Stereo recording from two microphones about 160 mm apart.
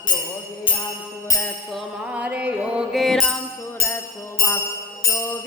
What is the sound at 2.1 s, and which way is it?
Music, 10° right (ahead or behind).